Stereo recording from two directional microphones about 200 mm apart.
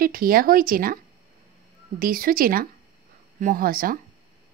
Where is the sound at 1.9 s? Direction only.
45° right (ahead or behind).